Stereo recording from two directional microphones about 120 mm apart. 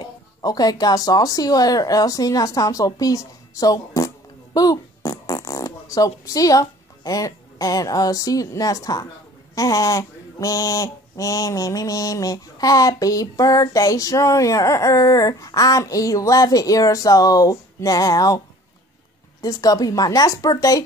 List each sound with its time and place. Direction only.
0.0 s speech: 35° left (ahead or behind)
9.6 s male singing: 30° left (ahead or behind)
19.4 s speech: 30° left (ahead or behind)